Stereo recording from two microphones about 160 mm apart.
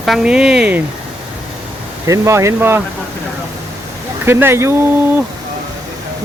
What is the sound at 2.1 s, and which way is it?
Speech, 20° right (ahead or behind).